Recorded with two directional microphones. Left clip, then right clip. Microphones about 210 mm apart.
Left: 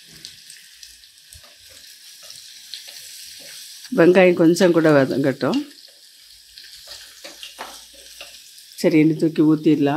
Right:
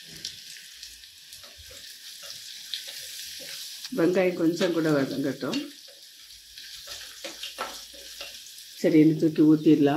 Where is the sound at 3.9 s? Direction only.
40° left (ahead or behind).